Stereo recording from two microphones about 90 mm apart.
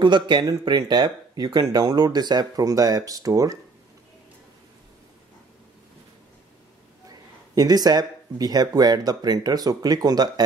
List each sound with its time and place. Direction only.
0.0 s speech: 60° right (ahead or behind); by 3.5 s 40° right (ahead or behind)
7.1 s speech: 45° right (ahead or behind)